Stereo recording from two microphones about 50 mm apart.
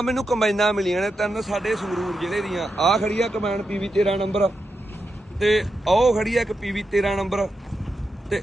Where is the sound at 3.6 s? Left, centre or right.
Centre.